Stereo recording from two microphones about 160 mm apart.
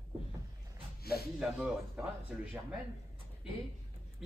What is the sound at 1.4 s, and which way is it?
Speech, 5° right (ahead or behind).